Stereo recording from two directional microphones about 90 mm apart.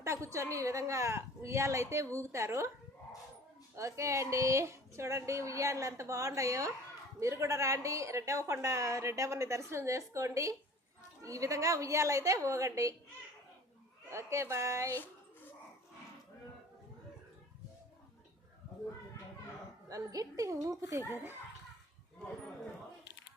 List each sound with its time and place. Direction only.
0.0 s a woman's voice: 30° right (ahead or behind)
3.8 s a woman's voice: 35° right (ahead or behind)
14.1 s a woman's voice: 30° right (ahead or behind)
19.9 s a woman's voice: 40° right (ahead or behind)